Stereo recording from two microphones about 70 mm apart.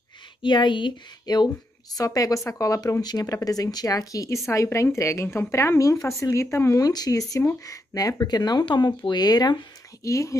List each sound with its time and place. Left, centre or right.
1.2 s speech: left
2.0 s speech: left
3.4 s speech: left
4.5 s speech: left
6.8 s speech: left
8.3 s speech: left
10.0 s speech: left